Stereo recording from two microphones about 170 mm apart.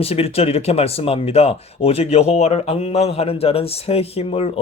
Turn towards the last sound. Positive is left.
turn(degrees=35)  # may be behind; listen again after turning